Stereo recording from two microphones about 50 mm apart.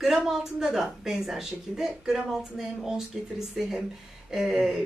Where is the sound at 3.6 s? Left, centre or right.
Centre.